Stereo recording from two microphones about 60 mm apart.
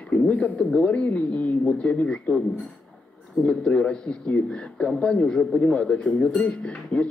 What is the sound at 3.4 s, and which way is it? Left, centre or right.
A man's voice, centre.